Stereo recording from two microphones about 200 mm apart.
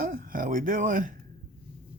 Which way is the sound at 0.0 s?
45° right (ahead or behind).